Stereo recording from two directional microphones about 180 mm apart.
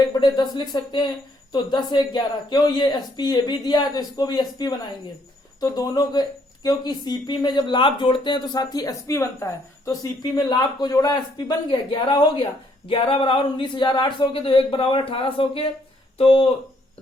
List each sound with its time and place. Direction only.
0.0 s speech: 25° left (ahead or behind)